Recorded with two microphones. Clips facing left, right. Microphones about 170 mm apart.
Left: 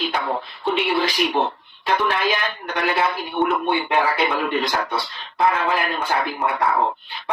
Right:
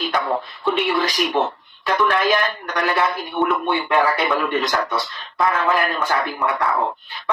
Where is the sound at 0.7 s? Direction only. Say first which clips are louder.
Right 1 dB; 45° right (ahead or behind).